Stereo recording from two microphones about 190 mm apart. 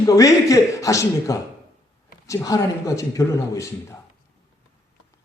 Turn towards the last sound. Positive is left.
turn(degrees=15)  # may be behind; listen again after turning